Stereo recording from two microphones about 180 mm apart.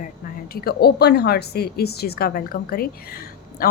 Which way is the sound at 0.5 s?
60° left (ahead or behind).